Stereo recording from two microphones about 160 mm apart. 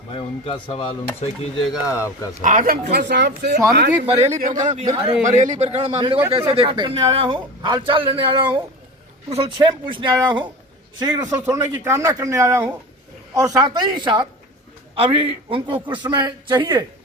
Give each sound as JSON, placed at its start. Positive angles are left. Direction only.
{"t": 0.1, "sound": "speech", "side_deg": 35}
{"t": 1.9, "sound": "speech", "side_deg": 20}
{"t": 2.4, "sound": "speech", "side_deg": -55}
{"t": 4.0, "sound": "speech", "side_deg": -40}
{"t": 4.7, "sound": "a man's voice", "side_deg": -40}
{"t": 5.2, "sound": "a man's voice", "side_deg": -50}